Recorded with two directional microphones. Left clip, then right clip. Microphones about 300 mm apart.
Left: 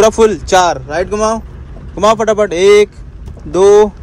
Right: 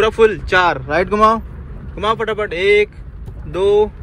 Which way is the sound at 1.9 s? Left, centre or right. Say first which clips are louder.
Left 8 dB; centre.